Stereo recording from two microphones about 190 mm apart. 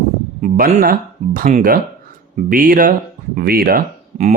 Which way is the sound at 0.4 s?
45° right (ahead or behind).